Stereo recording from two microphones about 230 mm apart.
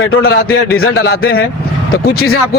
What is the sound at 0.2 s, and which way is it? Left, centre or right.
A man's voice, left.